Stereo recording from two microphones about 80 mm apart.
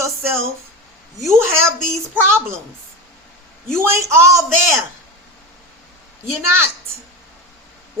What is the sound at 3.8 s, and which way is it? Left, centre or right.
Speech, right.